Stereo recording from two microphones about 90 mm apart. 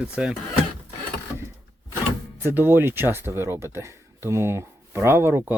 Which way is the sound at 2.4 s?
25° right (ahead or behind).